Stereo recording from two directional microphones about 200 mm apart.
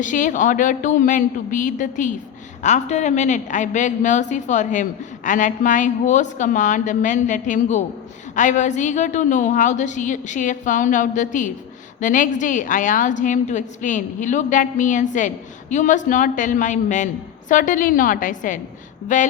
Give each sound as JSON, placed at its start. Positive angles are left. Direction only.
{"t": 0.0, "sound": "a woman's voice", "side_deg": 40}